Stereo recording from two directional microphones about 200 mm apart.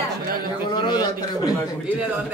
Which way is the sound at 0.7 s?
20° left (ahead or behind).